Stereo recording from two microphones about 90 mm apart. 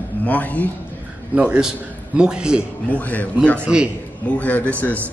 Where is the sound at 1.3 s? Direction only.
10° right (ahead or behind).